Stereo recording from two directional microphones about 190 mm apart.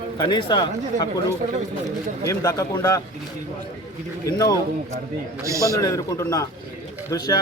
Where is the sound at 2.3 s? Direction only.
15° left (ahead or behind).